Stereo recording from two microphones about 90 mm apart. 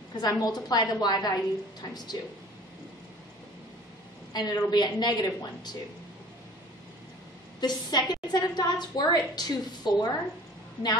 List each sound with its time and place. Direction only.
0.2 s a woman's voice: 45° left (ahead or behind)
4.3 s a woman's voice: 50° left (ahead or behind)
7.6 s a woman's voice: 50° left (ahead or behind)